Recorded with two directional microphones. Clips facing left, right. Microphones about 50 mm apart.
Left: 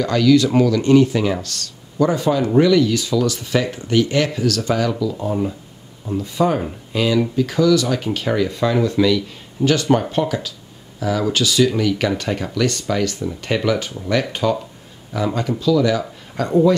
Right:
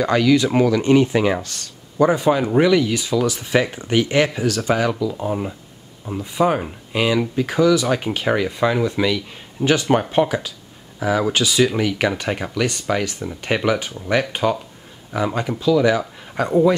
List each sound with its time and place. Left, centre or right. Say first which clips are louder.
0.0 s speech: left 1 dB; right